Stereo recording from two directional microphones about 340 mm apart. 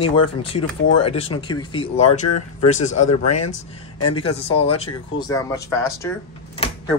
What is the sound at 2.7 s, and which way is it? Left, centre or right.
Speech, left.